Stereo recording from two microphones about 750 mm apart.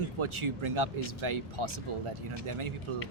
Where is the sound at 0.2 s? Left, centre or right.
Right.